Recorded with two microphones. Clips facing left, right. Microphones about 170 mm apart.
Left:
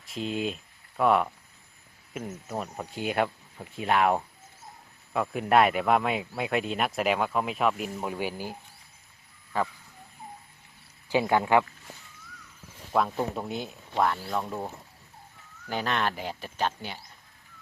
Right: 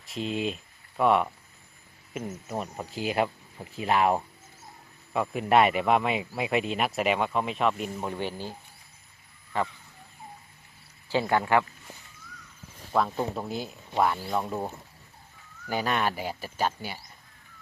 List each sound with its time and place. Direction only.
0.0 s speech: centre (ahead or behind)
11.1 s speech: 15° left (ahead or behind)
12.9 s speech: centre (ahead or behind)
15.7 s speech: 10° right (ahead or behind)